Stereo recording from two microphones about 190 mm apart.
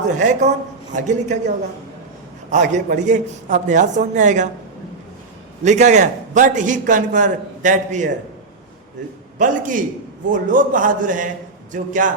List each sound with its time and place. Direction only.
0.2 s a man's voice: 40° right (ahead or behind)
5.6 s a man's voice: 40° right (ahead or behind)
9.4 s a man's voice: 45° right (ahead or behind)